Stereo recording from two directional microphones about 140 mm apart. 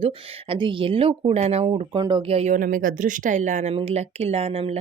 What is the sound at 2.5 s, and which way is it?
Speech, 80° right.